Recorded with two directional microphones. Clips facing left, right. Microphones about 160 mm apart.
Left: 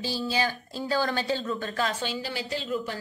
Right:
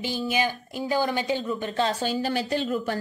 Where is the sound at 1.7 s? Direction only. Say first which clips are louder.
Right 7 dB; 30° right (ahead or behind); by 3.0 s 55° right (ahead or behind).